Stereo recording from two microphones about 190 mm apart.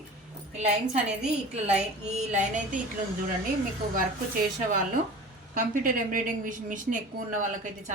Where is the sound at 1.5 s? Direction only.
35° right (ahead or behind).